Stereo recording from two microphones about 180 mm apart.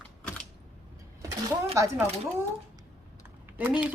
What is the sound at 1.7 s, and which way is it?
Speech, 15° right (ahead or behind).